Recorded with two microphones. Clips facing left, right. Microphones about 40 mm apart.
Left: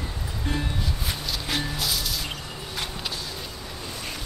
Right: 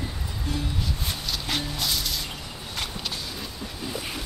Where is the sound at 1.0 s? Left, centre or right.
Centre.